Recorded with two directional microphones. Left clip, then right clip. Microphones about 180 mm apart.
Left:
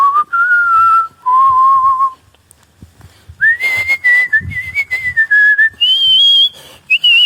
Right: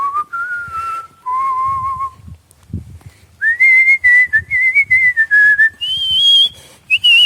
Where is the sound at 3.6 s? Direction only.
15° left (ahead or behind).